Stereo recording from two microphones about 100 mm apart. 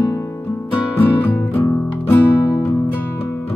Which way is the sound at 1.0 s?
20° left (ahead or behind).